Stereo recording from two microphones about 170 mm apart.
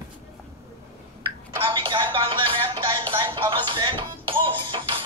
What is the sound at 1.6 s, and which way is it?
Music, 30° right (ahead or behind).